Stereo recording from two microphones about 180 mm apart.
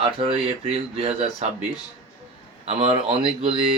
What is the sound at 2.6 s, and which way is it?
Speech, 30° right (ahead or behind).